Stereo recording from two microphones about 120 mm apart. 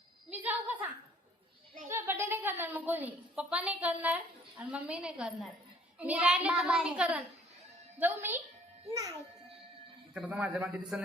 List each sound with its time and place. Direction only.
0.3 s a sound: 15° right (ahead or behind)
1.9 s a woman's voice: 20° right (ahead or behind)
8.9 s a child's voice: 30° right (ahead or behind)
10.2 s a woman's voice: 10° right (ahead or behind)